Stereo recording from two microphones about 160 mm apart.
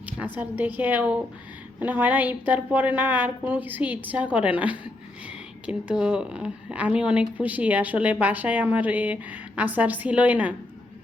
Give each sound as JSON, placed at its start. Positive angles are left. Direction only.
{"t": 0.0, "sound": "speech", "side_deg": -10}